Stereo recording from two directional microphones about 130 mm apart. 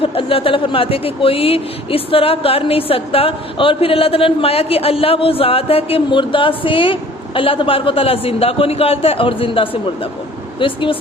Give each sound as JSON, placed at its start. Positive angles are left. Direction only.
{"t": 0.0, "sound": "speech", "side_deg": 45}